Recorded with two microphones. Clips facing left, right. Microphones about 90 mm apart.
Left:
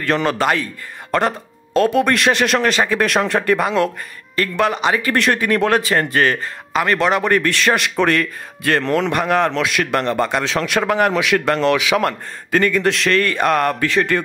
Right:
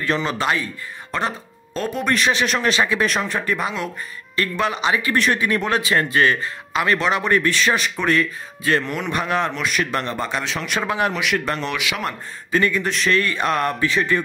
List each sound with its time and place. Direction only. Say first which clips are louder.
0.0 s speech: left 4 dB; 60° left (ahead or behind)
1.1 s speech: left 6 dB; 65° left (ahead or behind)
2.6 s a man's voice: left 2 dB; 45° left (ahead or behind)
3.1 s speech: left 6 dB; 65° left (ahead or behind)
4.4 s a man's voice: left 4 dB; 50° left (ahead or behind)
5.1 s a man's voice: left 3 dB; 60° left (ahead or behind); by 9.1 s 90° left
9.1 s speech: left 2 dB; 55° left (ahead or behind)
9.5 s a man's voice: left 4 dB; 90° left; by 10.0 s 70° left (ahead or behind)
10.1 s speech: left 6 dB; 55° left (ahead or behind)
11.3 s speech: left 7 dB; 80° left